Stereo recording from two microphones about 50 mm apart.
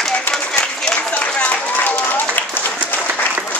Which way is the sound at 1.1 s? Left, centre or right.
Left.